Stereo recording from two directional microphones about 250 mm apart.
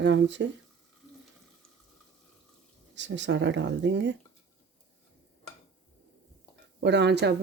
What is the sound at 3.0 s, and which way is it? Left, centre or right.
Speech, right.